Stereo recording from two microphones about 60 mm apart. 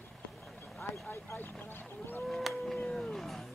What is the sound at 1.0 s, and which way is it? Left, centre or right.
Speech, left.